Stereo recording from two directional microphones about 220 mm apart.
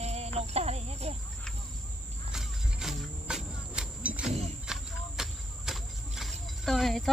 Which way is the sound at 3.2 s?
5° right (ahead or behind).